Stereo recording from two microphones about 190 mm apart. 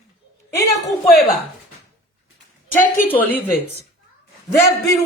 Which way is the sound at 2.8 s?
45° left (ahead or behind).